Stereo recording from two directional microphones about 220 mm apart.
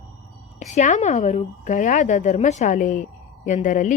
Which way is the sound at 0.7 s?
35° left (ahead or behind).